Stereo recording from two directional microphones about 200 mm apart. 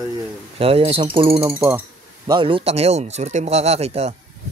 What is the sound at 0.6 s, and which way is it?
Speech, 30° right (ahead or behind).